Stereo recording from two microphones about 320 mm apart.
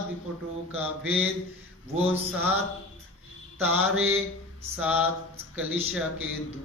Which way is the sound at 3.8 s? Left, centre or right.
Right.